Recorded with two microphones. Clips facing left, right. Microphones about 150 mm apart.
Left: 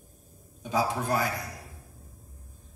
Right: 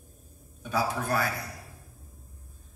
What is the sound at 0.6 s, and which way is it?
Speech, 20° left (ahead or behind).